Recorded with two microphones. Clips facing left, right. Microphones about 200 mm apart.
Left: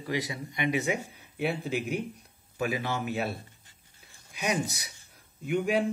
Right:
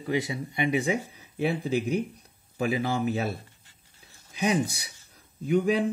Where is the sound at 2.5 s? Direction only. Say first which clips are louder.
Right 4 dB; 30° right (ahead or behind).